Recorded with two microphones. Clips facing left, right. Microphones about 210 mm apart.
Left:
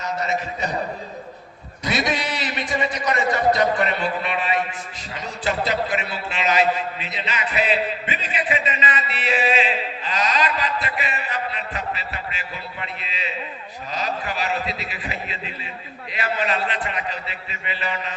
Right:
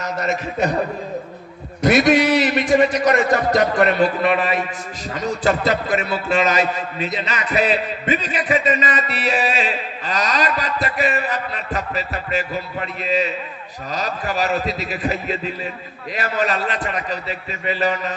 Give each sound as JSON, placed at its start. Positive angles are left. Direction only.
{"t": 0.0, "sound": "a man's voice", "side_deg": -45}
{"t": 1.8, "sound": "a man's voice", "side_deg": -45}